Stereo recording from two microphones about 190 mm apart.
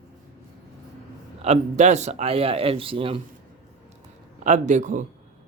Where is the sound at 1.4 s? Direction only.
35° right (ahead or behind).